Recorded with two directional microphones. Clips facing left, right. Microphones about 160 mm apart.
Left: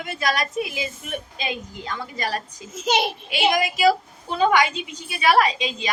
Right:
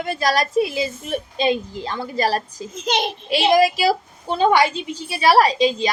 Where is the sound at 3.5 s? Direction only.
35° right (ahead or behind).